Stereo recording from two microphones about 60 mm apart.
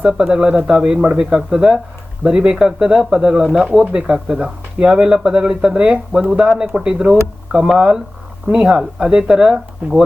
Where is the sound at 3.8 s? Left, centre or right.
Centre.